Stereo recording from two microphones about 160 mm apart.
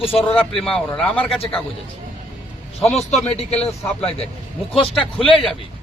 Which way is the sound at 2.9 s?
45° left (ahead or behind).